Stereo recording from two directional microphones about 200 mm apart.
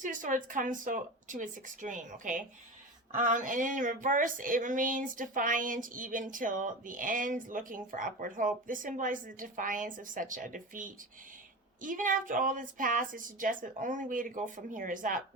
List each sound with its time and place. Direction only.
0.0 s speech: 40° right (ahead or behind)